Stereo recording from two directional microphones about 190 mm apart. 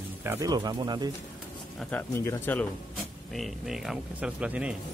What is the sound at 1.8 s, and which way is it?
Speech, 10° left (ahead or behind).